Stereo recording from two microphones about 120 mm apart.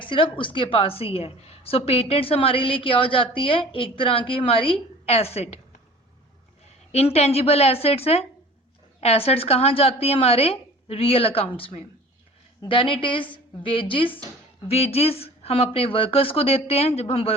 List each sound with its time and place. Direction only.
0.0 s a woman's voice: 45° left (ahead or behind); by 5.5 s 60° left (ahead or behind)
6.9 s a woman's voice: 60° left (ahead or behind)
14.7 s a woman's voice: 55° left (ahead or behind)